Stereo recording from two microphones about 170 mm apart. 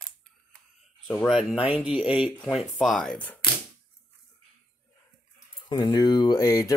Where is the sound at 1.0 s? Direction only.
Centre (ahead or behind).